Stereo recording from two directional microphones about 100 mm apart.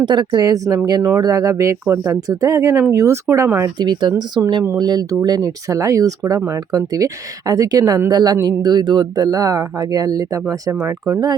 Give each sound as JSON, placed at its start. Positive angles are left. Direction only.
{"t": 0.0, "sound": "speech", "side_deg": -50}
{"t": 3.8, "sound": "speech", "side_deg": -50}